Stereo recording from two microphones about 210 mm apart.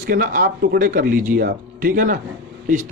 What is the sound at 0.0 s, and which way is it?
Speech, 40° right (ahead or behind).